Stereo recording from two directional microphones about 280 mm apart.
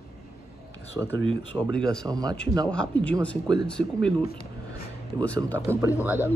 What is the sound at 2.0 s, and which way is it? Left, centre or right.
Speech, centre.